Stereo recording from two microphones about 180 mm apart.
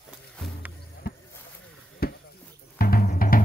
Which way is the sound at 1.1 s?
60° left (ahead or behind).